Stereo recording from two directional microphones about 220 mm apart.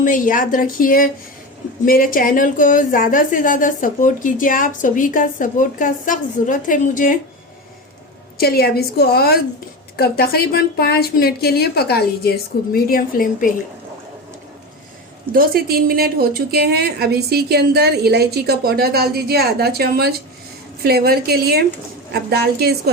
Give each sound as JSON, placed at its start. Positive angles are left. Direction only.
{"t": 0.0, "sound": "a woman's voice", "side_deg": 35}
{"t": 8.4, "sound": "a woman's voice", "side_deg": 45}
{"t": 15.3, "sound": "a woman's voice", "side_deg": -40}